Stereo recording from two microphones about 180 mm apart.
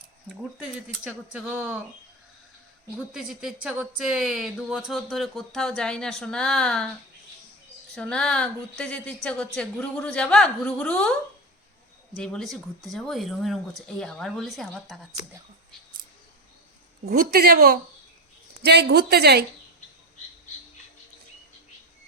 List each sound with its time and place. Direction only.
1.0 s speech: 5° right (ahead or behind)
3.1 s speech: 5° right (ahead or behind)
7.9 s speech: 5° left (ahead or behind)
12.1 s speech: 5° left (ahead or behind)
17.1 s a woman's voice: 55° right (ahead or behind)
18.6 s a woman's voice: 70° right (ahead or behind)